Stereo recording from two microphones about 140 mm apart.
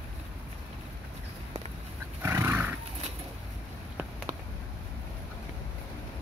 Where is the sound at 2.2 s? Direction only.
15° right (ahead or behind).